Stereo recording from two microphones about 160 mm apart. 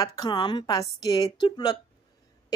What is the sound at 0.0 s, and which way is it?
Speech, 20° left (ahead or behind).